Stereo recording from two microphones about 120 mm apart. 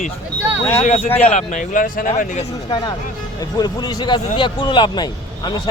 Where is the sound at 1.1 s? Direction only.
10° left (ahead or behind).